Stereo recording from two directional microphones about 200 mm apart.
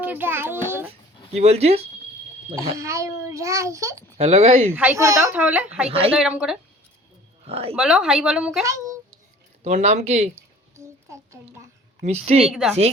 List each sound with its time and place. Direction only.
0.0 s a child's voice: 10° right (ahead or behind)
0.9 s speech: 30° right (ahead or behind)
2.7 s a child's voice: 15° right (ahead or behind)
4.2 s speech: 30° right (ahead or behind)
4.7 s a child's voice: 10° right (ahead or behind)
7.4 s speech: 30° right (ahead or behind)
7.8 s a woman's voice: 5° right (ahead or behind)
8.7 s a child's voice: 15° right (ahead or behind)
9.6 s speech: 35° right (ahead or behind)
10.8 s a sound: 15° right (ahead or behind)
12.0 s speech: 30° right (ahead or behind)
12.5 s a woman's voice: centre (ahead or behind)